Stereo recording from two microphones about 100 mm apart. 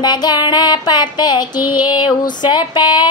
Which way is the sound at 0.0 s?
45° left (ahead or behind).